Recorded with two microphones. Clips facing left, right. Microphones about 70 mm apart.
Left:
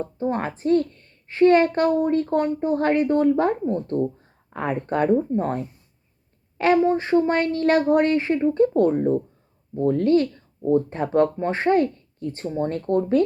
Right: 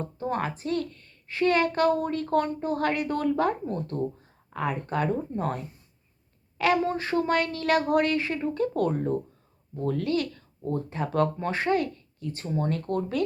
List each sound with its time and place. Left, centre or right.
0.0 s speech: left
1.9 s speech: left
4.5 s speech: left
6.8 s speech: left
10.8 s speech: left